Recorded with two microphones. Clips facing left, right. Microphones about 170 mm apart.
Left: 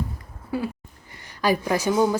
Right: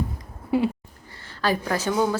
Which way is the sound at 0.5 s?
25° right (ahead or behind).